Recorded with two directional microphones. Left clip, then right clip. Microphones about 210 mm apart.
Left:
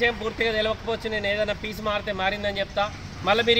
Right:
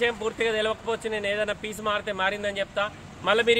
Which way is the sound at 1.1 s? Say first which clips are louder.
Left 3 dB; 60° right (ahead or behind).